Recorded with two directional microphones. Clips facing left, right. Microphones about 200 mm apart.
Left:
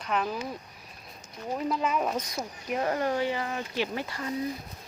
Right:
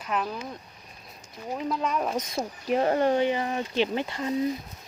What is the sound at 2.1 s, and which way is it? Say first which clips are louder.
Speech: right 3 dB; 25° right (ahead or behind).